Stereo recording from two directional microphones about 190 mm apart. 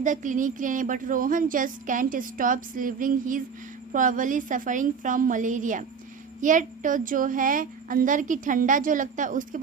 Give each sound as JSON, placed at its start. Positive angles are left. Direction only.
{"t": 0.0, "sound": "a woman's voice", "side_deg": -40}